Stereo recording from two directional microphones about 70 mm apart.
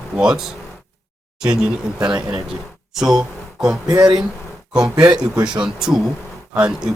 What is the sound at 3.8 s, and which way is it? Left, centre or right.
Speech, right.